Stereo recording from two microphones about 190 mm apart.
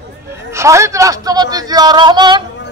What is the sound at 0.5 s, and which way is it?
Speech, 15° right (ahead or behind).